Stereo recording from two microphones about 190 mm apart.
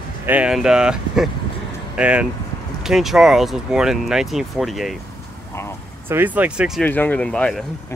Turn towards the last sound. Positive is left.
turn(degrees=5)  # may be behind; listen again after turning